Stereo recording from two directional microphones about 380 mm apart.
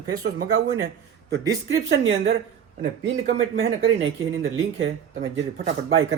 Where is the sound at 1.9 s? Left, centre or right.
Right.